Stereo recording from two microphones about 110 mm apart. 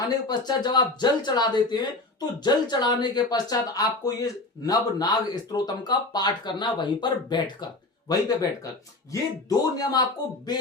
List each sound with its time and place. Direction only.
0.0 s speech: 40° left (ahead or behind)